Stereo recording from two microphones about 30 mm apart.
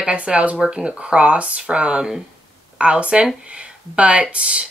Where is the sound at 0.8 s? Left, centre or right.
Right.